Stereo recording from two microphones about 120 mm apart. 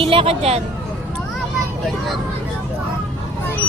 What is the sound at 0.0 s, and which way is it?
Speech, 50° right (ahead or behind).